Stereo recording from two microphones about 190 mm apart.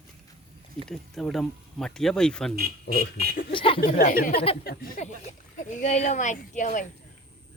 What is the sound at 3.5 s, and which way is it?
Speech, 25° left (ahead or behind).